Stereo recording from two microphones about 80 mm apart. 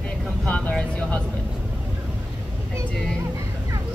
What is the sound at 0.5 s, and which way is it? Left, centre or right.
Vehicle, centre.